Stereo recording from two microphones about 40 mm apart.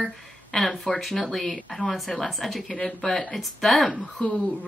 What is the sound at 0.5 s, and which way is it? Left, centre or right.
Speech, centre.